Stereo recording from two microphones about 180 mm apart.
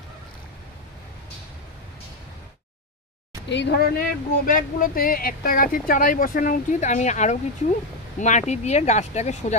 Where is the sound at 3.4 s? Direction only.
75° left (ahead or behind).